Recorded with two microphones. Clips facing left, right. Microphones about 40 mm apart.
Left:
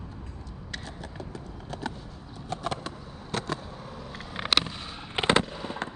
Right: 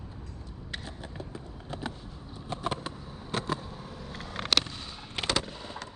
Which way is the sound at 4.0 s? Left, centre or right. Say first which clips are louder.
Left 2 dB; centre.